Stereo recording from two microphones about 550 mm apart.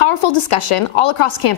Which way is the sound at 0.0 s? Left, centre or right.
Left.